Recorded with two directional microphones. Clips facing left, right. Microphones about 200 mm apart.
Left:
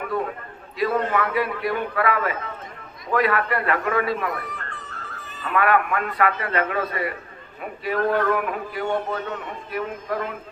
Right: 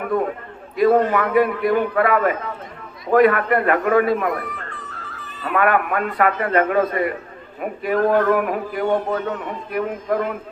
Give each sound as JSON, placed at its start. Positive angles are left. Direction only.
{"t": 0.8, "sound": "speech", "side_deg": -50}
{"t": 4.5, "sound": "music", "side_deg": 45}
{"t": 5.4, "sound": "speech", "side_deg": -45}